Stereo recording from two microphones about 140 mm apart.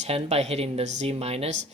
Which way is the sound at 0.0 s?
50° right (ahead or behind).